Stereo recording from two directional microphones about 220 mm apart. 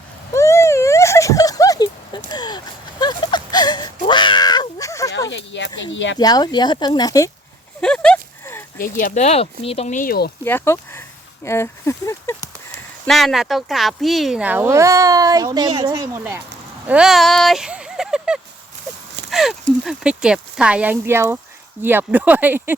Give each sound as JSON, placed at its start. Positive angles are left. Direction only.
{"t": 0.3, "sound": "a sound", "side_deg": 10}
{"t": 5.1, "sound": "speech", "side_deg": 50}
{"t": 6.1, "sound": "speech", "side_deg": 20}
{"t": 7.8, "sound": "a sound", "side_deg": 5}
{"t": 8.8, "sound": "speech", "side_deg": 40}
{"t": 10.4, "sound": "speech", "side_deg": 10}
{"t": 13.1, "sound": "speech", "side_deg": 0}
{"t": 19.3, "sound": "a sound", "side_deg": 0}
{"t": 19.8, "sound": "speech", "side_deg": 0}